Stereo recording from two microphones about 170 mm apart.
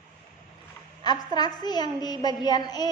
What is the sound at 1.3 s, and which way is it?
A woman's voice, 25° left (ahead or behind).